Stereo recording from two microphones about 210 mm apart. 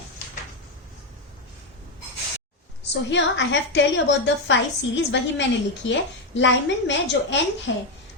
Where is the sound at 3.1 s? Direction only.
60° left (ahead or behind).